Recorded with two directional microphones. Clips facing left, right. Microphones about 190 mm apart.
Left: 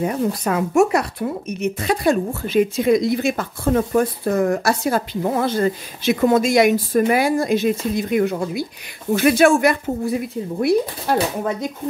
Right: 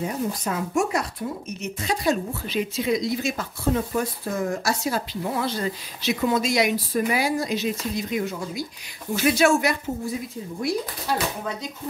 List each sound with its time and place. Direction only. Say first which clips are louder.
0.0 s speech: left 6 dB; 65° left (ahead or behind)